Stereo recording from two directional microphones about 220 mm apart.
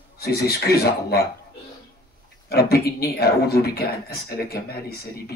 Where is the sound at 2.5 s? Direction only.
45° left (ahead or behind).